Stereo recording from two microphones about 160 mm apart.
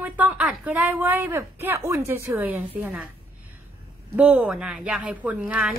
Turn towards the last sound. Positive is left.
turn(degrees=-5)  # may be behind; listen again after turning